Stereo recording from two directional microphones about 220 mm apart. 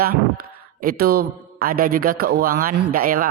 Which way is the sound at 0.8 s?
40° right (ahead or behind).